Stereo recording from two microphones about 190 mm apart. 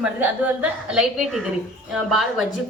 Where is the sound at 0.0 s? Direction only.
10° right (ahead or behind).